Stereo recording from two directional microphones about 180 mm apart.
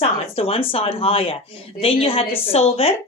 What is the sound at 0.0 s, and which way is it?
Speech, 35° left (ahead or behind).